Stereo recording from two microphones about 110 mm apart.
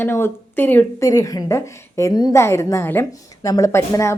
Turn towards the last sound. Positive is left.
turn(degrees=25)  # may be behind; listen again after turning